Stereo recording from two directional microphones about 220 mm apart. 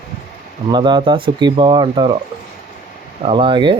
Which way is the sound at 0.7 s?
20° right (ahead or behind).